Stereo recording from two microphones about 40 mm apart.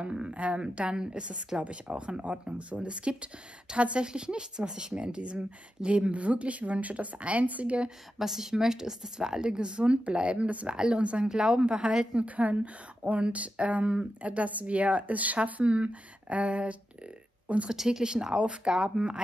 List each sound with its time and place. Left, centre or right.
0.0 s a woman's voice: right
0.3 s speech: right
8.2 s speech: centre
12.3 s speech: right
17.6 s speech: centre